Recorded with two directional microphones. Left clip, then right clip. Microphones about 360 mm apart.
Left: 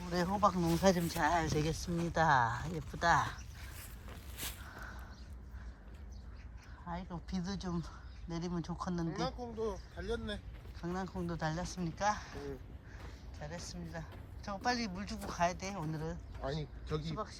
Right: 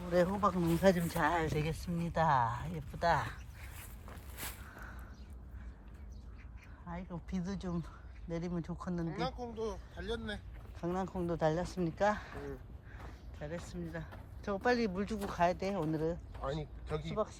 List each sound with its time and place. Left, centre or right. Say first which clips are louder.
0.1 s speech: right 1 dB; centre
4.0 s a sound: left 1 dB; centre
6.8 s speech: left 2 dB; centre
9.0 s speech: even; right; by 15.7 s centre
16.4 s speech: right 1 dB; centre